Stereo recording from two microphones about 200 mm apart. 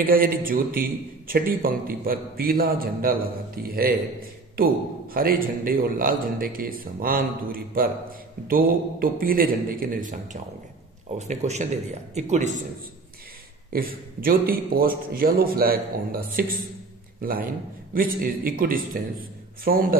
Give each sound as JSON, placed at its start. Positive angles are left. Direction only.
{"t": 0.0, "sound": "a man's voice", "side_deg": -45}
{"t": 13.7, "sound": "a man's voice", "side_deg": -45}